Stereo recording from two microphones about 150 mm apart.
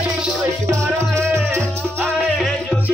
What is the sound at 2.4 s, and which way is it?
Music, centre (ahead or behind).